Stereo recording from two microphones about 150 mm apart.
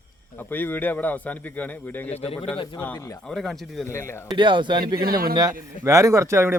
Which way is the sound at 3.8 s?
15° left (ahead or behind).